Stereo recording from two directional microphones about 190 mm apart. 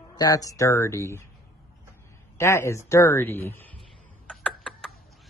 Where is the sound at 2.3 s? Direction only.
15° left (ahead or behind).